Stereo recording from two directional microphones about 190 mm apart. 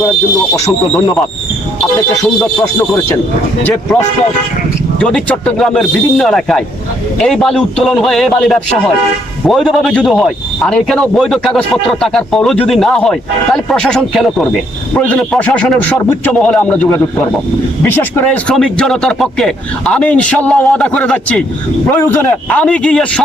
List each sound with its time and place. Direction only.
0.6 s speech: 15° left (ahead or behind)
2.4 s speech: 15° left (ahead or behind)
4.9 s a man's voice: 5° left (ahead or behind)